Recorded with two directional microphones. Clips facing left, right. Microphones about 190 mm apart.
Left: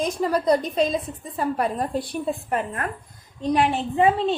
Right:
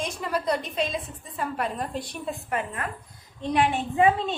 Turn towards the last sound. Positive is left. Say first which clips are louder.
# left 2 dB
turn(degrees=30)  # may be behind; listen again after turning